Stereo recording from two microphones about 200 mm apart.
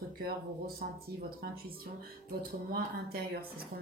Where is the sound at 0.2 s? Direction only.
50° right (ahead or behind).